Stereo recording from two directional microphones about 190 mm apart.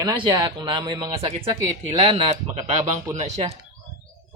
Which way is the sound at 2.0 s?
30° right (ahead or behind).